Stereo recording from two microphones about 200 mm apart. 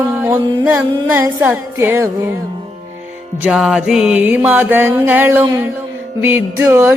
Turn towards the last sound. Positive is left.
turn(degrees=-10)  # may be behind; listen again after turning